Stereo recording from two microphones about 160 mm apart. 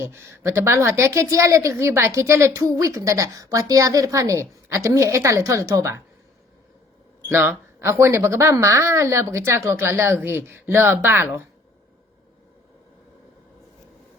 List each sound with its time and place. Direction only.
0.0 s a woman's voice: 15° right (ahead or behind)
7.3 s speech: 15° right (ahead or behind)